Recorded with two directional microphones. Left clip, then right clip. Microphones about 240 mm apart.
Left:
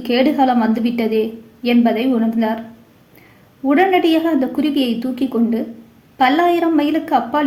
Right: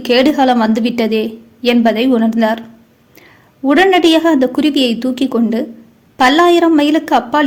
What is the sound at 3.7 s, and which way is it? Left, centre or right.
A woman's voice, right.